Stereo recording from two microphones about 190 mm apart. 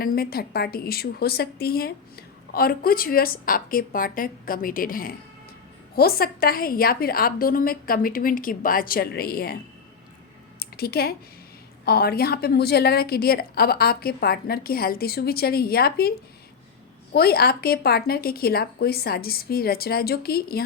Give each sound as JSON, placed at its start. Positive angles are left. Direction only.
{"t": 0.0, "sound": "a woman's voice", "side_deg": 50}
{"t": 10.6, "sound": "a sound", "side_deg": 55}
{"t": 11.9, "sound": "a woman's voice", "side_deg": 55}